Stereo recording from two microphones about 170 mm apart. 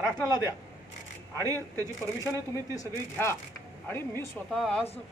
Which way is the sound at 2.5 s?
20° left (ahead or behind).